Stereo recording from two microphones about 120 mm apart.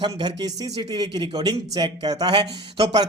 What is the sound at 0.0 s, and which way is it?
A man's voice, 40° right (ahead or behind).